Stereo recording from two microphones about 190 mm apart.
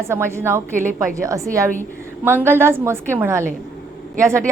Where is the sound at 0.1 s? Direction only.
15° right (ahead or behind).